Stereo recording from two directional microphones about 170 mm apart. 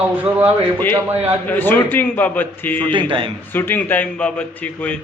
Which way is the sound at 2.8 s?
30° right (ahead or behind).